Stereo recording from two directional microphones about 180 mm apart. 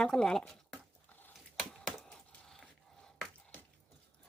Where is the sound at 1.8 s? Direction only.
5° left (ahead or behind).